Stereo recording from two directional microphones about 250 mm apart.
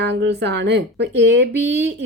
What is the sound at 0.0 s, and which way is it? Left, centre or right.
Speech, right.